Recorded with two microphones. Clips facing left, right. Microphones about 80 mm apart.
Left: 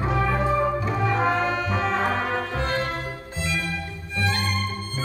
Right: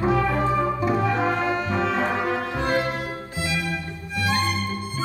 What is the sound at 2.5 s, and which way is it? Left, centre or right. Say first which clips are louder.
Music: right 3 dB; centre.